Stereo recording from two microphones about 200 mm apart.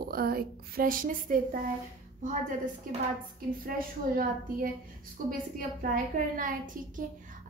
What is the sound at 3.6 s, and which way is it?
A woman's voice, 45° right (ahead or behind).